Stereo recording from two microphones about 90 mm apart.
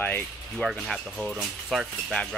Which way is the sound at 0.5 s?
5° left (ahead or behind).